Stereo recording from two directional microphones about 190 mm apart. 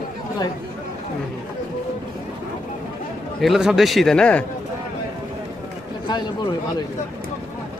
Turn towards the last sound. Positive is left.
turn(degrees=25)  # may be behind; listen again after turning